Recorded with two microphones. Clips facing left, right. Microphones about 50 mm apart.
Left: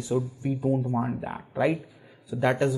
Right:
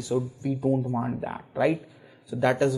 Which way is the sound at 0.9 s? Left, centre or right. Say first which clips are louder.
Even; centre.